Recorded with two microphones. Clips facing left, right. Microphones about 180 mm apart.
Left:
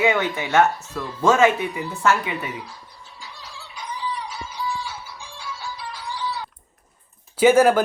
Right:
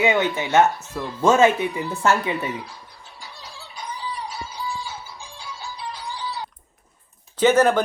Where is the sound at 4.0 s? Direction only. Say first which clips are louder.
Left 2 dB; 35° right (ahead or behind).